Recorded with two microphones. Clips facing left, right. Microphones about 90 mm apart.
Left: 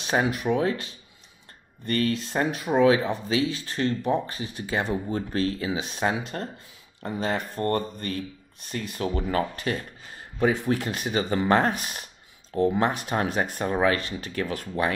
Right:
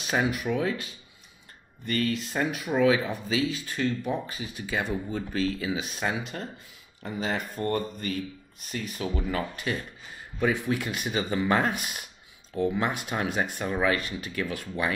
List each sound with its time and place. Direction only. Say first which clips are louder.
0.0 s speech: left 2 dB; 35° left (ahead or behind)
5.1 s speech: left 2 dB; 50° left (ahead or behind)
5.7 s speech: left 3 dB; 35° left (ahead or behind)